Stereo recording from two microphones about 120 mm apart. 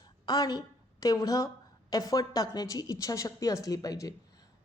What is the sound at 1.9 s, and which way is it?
A woman's voice, 30° left (ahead or behind).